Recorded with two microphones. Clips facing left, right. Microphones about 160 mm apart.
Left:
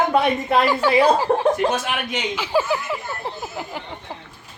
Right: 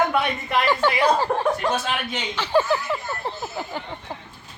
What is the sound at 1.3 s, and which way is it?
Speech, 30° left (ahead or behind).